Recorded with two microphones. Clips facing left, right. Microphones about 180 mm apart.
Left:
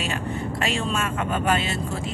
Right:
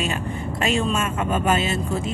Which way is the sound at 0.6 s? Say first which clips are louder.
Right 5 dB; 20° right (ahead or behind).